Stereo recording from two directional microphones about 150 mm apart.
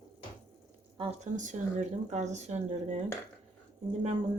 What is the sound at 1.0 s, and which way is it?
Speech, 45° right (ahead or behind).